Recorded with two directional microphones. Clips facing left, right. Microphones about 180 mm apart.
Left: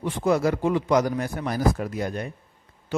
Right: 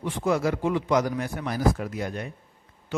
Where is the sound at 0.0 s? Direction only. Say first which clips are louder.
Left 3 dB; 40° left (ahead or behind).